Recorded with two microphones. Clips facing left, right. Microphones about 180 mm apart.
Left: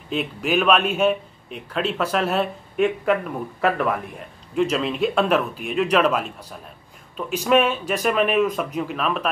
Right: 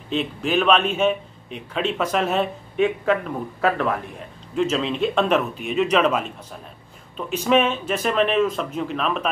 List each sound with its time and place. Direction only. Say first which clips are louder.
0.1 s a man's voice: even; 5° left (ahead or behind)